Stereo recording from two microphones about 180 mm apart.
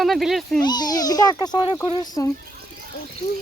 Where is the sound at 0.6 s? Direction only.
25° left (ahead or behind).